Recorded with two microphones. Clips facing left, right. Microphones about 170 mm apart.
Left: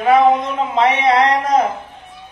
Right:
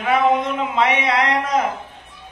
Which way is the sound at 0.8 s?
40° left (ahead or behind).